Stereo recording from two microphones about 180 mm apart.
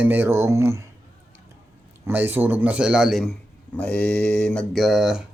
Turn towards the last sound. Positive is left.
turn(degrees=-5)  # may be behind; listen again after turning